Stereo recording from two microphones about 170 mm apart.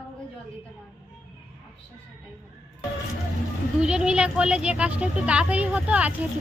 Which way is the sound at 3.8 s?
5° right (ahead or behind).